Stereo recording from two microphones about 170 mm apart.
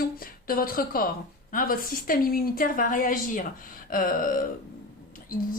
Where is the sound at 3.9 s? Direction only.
55° left (ahead or behind).